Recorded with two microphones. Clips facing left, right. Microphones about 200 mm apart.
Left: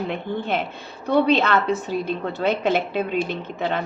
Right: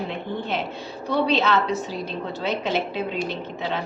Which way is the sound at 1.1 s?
55° left (ahead or behind).